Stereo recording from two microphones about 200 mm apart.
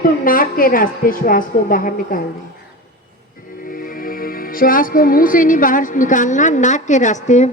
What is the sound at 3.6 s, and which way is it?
Speech, 45° left (ahead or behind).